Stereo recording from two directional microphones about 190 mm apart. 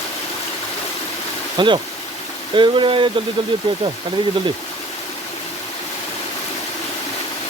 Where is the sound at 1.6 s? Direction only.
25° right (ahead or behind).